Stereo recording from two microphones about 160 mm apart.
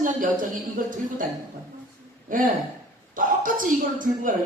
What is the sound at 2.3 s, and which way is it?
A woman's voice, 60° right (ahead or behind).